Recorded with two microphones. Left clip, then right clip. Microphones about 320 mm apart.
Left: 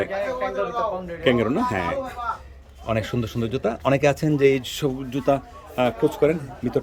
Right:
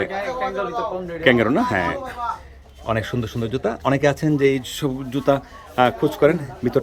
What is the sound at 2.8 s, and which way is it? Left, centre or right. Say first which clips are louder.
Speech: right 2 dB; centre.